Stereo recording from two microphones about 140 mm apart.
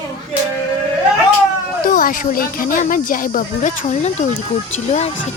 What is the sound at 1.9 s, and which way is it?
Speech, 80° left.